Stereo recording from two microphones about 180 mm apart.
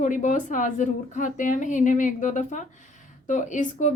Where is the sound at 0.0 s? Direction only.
45° left (ahead or behind).